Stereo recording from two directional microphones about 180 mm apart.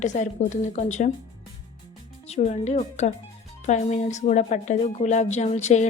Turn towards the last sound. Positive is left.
turn(degrees=40)  # may be behind; listen again after turning